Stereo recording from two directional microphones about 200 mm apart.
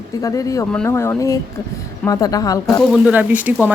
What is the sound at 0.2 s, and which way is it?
A woman's voice, 15° left (ahead or behind).